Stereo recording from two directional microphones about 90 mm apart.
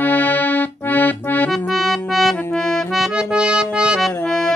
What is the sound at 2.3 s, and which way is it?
Accordion, 5° left (ahead or behind).